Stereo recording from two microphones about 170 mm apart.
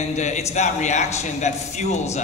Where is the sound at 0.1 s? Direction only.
45° left (ahead or behind).